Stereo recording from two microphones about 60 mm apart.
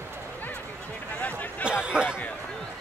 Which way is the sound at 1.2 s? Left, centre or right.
Left.